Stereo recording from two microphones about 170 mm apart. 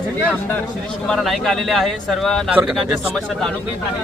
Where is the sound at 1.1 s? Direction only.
Centre (ahead or behind).